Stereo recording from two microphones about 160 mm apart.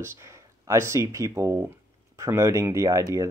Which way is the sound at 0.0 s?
15° right (ahead or behind).